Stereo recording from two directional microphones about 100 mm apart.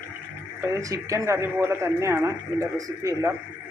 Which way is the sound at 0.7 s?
35° right (ahead or behind).